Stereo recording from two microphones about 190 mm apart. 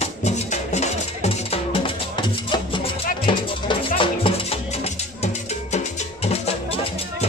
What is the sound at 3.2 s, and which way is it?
Music, 25° left (ahead or behind).